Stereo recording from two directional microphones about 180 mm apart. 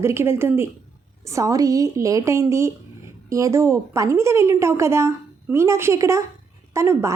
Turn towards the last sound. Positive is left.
turn(degrees=-15)  # may be behind; listen again after turning